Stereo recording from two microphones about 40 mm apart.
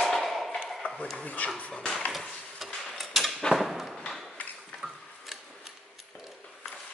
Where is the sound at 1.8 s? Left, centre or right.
Centre.